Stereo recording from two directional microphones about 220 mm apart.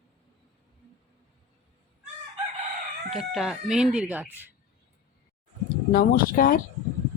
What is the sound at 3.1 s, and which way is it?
Speech, centre (ahead or behind).